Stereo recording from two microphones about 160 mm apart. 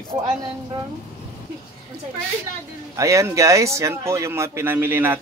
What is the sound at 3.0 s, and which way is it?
Speech, 20° right (ahead or behind).